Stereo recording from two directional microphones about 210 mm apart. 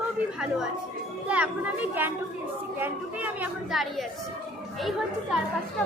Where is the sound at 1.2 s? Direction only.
5° right (ahead or behind).